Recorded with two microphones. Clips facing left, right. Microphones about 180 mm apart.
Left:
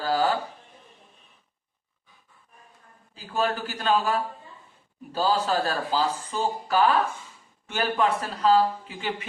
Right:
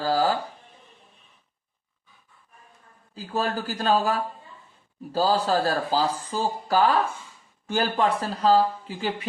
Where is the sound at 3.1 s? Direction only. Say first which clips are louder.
Even; 35° right (ahead or behind).